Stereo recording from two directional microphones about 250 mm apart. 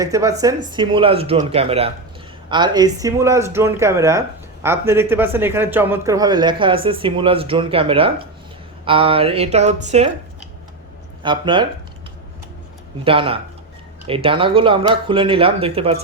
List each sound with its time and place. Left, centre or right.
0.0 s a man's voice: centre
11.2 s speech: centre
13.1 s speech: right